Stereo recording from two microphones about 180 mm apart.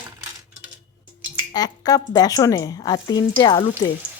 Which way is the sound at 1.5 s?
20° left (ahead or behind).